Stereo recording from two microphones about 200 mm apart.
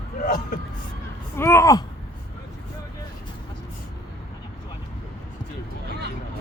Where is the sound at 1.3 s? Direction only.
15° left (ahead or behind).